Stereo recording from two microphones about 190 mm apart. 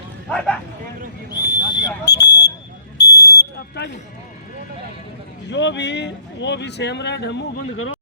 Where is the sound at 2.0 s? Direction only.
60° left (ahead or behind).